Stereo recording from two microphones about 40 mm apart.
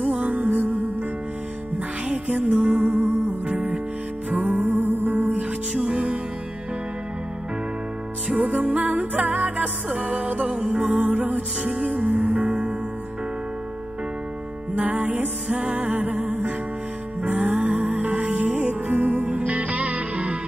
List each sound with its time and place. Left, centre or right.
0.4 s music: right
2.0 s music: right
5.7 s music: right
8.4 s music: right
10.5 s music: right
11.6 s music: right
14.8 s music: right
15.4 s music: right
15.7 s music: right